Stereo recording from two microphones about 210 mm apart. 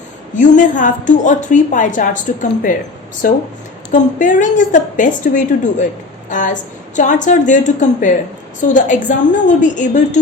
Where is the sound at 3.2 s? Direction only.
40° left (ahead or behind).